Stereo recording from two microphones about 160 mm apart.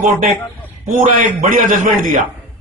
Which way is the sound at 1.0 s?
50° right (ahead or behind).